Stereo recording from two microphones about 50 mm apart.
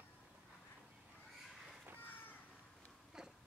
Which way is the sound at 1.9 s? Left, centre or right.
Left.